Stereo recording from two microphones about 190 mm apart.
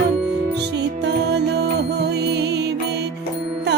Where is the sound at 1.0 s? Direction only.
60° right (ahead or behind).